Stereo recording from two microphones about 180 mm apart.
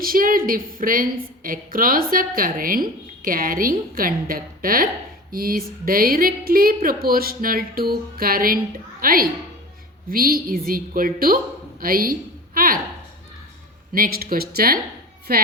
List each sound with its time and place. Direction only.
0.0 s a woman's voice: 50° right (ahead or behind)
13.9 s speech: 55° right (ahead or behind)